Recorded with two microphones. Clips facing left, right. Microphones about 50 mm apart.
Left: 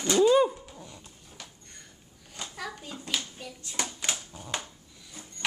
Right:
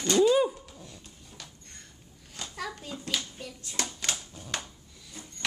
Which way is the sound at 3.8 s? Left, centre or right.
Centre.